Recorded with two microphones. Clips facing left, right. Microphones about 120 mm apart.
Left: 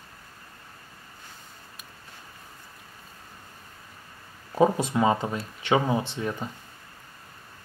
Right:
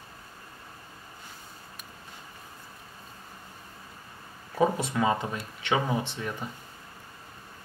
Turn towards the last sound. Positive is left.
turn(degrees=25)  # may be behind; listen again after turning